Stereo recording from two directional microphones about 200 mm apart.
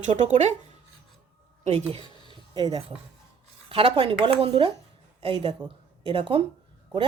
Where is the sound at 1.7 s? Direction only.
30° right (ahead or behind).